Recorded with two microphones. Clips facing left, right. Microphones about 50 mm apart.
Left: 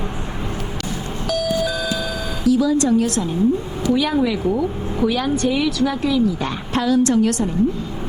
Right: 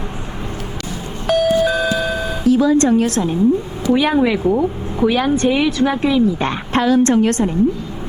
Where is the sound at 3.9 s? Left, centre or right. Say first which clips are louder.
Right 4 dB; right.